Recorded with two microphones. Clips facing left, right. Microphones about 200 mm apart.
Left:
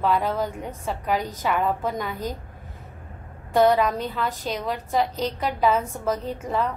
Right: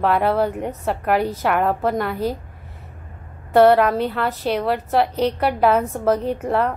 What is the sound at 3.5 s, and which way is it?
A woman's voice, 65° right (ahead or behind).